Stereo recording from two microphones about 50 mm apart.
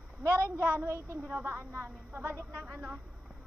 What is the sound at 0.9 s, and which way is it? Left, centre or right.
Speech, right.